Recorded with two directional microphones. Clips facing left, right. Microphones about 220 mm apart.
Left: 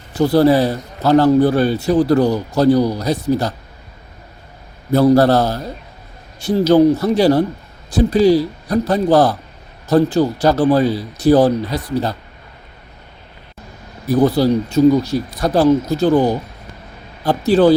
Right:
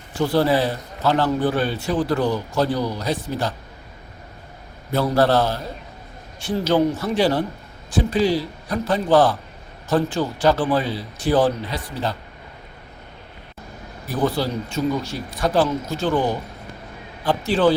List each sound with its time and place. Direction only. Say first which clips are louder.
0.2 s a man's voice: left 6 dB; 40° left (ahead or behind)
4.9 s a man's voice: left 7 dB; 40° left (ahead or behind)
14.1 s a man's voice: left 9 dB; 40° left (ahead or behind)